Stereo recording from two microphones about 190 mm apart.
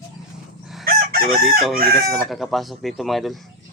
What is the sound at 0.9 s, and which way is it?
Chicken, 50° right (ahead or behind).